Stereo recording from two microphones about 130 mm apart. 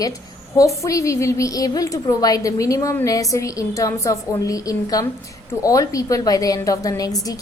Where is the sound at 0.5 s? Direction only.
25° left (ahead or behind).